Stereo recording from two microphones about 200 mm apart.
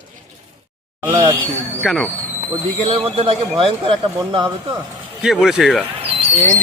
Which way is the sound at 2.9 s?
25° right (ahead or behind).